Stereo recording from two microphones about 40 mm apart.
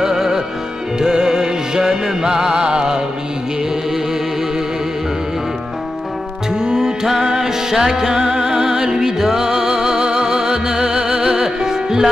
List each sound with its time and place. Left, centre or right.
0.0 s music: centre
6.5 s music: centre